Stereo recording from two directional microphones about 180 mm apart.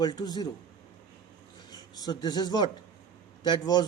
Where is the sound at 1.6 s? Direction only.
20° left (ahead or behind).